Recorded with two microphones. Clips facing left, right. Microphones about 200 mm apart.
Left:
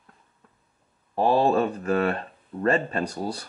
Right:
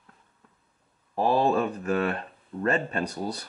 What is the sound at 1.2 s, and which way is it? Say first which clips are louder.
Speech: left 2 dB; 35° left (ahead or behind).